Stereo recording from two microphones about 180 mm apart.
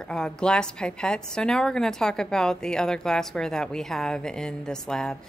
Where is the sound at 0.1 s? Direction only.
5° left (ahead or behind).